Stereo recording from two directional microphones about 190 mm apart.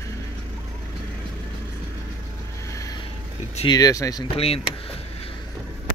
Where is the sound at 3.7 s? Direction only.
20° left (ahead or behind).